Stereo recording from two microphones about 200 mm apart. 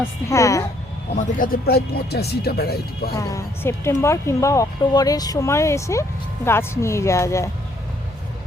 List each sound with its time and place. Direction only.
0.3 s speech: 15° left (ahead or behind)
1.4 s speech: 50° left (ahead or behind)
3.2 s speech: 15° left (ahead or behind)